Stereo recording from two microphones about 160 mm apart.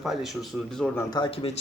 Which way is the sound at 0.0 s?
Centre (ahead or behind).